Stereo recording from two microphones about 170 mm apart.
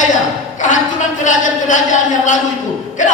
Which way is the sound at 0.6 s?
50° left (ahead or behind).